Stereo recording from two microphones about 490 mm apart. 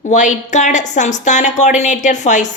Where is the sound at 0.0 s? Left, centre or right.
Centre.